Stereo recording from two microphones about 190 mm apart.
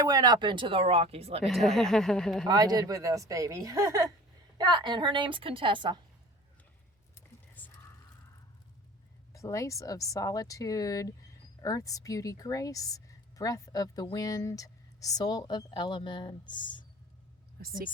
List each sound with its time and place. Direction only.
0.0 s speech: 20° right (ahead or behind)
1.5 s speech: centre (ahead or behind)
2.5 s speech: 20° right (ahead or behind)
7.5 s whispering: 10° left (ahead or behind)
9.3 s a woman's voice: 15° left (ahead or behind)
17.6 s speech: 55° right (ahead or behind)